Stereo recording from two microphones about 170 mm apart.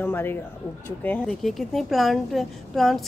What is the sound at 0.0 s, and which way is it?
A woman's voice, 10° left (ahead or behind).